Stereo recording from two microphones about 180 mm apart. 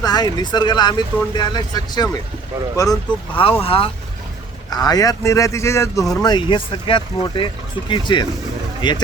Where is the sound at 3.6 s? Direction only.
30° left (ahead or behind).